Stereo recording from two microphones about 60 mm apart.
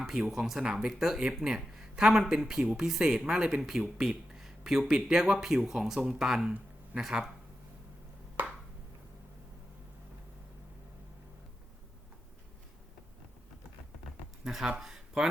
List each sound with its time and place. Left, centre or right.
0.0 s speech: centre
0.6 s speech: centre
8.4 s a sound: right
14.4 s speech: centre